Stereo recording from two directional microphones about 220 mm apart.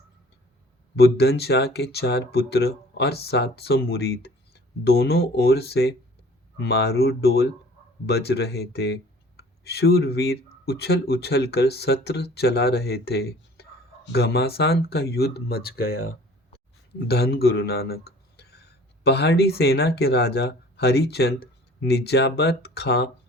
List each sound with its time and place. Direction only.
0.9 s speech: 45° left (ahead or behind)
17.1 s speech: 45° left (ahead or behind)